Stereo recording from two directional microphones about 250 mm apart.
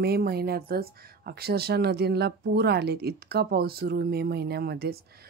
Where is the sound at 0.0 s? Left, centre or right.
Right.